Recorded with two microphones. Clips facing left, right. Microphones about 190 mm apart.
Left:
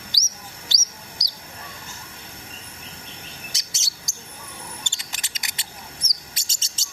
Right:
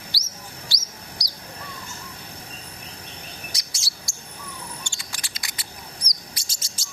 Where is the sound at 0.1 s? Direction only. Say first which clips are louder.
Right 1 dB; 20° left (ahead or behind).